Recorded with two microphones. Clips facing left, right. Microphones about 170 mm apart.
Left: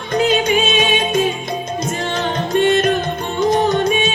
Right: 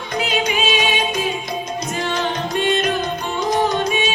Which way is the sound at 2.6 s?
50° left (ahead or behind).